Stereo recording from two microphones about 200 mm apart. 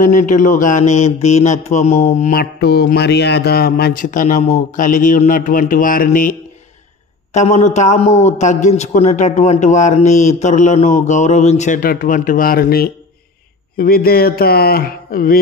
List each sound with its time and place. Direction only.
0.0 s a man's voice: 40° left (ahead or behind)
2.6 s speech: 50° left (ahead or behind)
7.3 s a man's voice: 35° left (ahead or behind)